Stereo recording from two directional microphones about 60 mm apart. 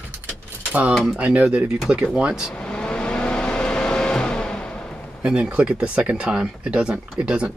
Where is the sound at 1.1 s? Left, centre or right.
Right.